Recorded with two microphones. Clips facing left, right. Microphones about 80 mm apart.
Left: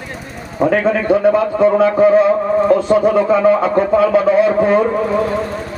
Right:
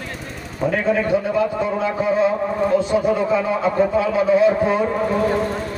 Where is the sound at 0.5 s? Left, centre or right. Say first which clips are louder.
Left 5 dB; left.